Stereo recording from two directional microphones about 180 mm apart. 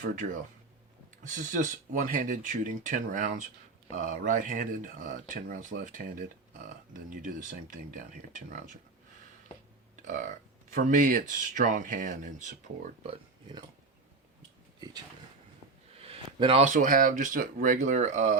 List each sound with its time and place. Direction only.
0.2 s speech: 65° right (ahead or behind)
1.2 s speech: 45° right (ahead or behind)
9.9 s burping: 45° right (ahead or behind)
10.7 s speech: 50° right (ahead or behind)
13.1 s speech: 25° right (ahead or behind)
16.0 s a sound: 30° right (ahead or behind)
16.6 s speech: 45° right (ahead or behind)